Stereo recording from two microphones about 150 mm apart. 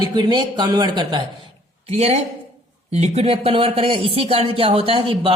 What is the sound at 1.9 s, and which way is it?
A woman's voice, 45° right (ahead or behind).